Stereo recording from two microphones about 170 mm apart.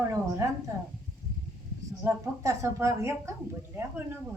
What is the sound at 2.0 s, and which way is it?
A woman's voice, 20° right (ahead or behind).